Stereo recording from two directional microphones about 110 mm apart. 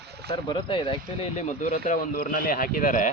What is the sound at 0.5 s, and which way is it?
Speech, 50° left (ahead or behind).